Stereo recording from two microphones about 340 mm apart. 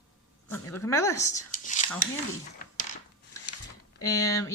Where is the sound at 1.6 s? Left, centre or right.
Left.